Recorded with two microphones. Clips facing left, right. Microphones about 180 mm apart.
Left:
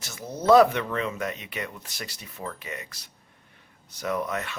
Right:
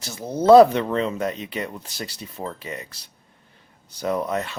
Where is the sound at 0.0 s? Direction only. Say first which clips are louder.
Right 6 dB; 30° right (ahead or behind).